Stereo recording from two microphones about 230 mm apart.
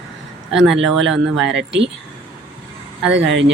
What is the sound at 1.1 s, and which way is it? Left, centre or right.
Speech, centre.